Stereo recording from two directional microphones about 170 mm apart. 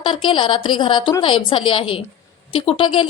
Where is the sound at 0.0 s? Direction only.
30° left (ahead or behind).